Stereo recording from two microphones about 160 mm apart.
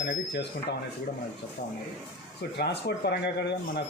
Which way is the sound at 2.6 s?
90° left.